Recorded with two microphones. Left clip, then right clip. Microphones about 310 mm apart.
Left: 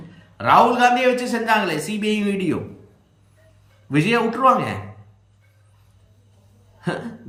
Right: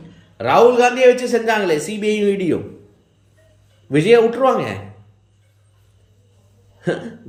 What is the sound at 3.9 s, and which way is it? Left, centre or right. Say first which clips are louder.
Speech: right 7 dB; centre.